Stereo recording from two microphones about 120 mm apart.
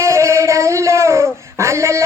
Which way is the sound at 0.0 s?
25° right (ahead or behind).